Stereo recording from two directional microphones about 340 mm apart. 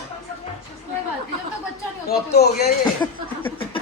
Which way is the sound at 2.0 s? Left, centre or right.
Left.